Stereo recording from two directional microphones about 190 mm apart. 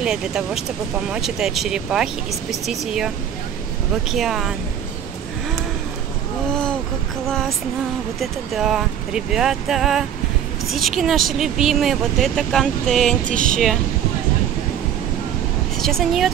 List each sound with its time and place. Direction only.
0.0 s speech: 5° right (ahead or behind)
4.1 s speech: centre (ahead or behind)
7.2 s speech: 5° left (ahead or behind)
13.2 s speech: 45° right (ahead or behind)
13.5 s speech: centre (ahead or behind)
15.8 s speech: centre (ahead or behind)